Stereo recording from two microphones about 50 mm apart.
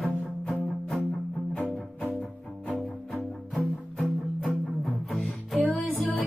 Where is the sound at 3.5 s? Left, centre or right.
Centre.